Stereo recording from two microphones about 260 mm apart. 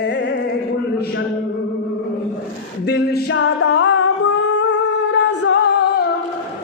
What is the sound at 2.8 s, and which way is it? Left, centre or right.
Singing, left.